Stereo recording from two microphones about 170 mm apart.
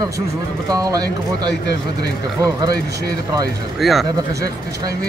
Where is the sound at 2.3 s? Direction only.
20° right (ahead or behind).